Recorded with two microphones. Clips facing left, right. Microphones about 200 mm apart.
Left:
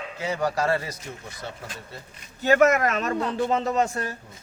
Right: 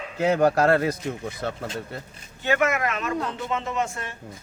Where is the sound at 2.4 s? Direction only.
40° left (ahead or behind).